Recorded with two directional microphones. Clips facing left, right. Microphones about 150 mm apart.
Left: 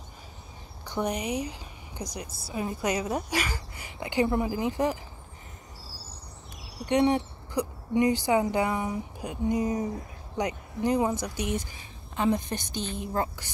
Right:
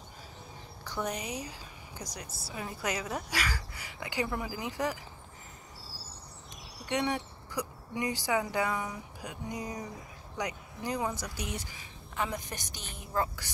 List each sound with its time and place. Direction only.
0.8 s a woman's voice: 20° left (ahead or behind)
6.9 s a woman's voice: 25° left (ahead or behind)